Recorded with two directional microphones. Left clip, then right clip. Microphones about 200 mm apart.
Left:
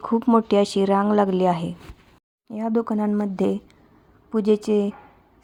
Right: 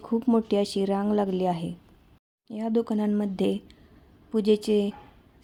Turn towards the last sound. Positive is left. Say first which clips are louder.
# left 3 dB
turn(degrees=5)  # may be behind; listen again after turning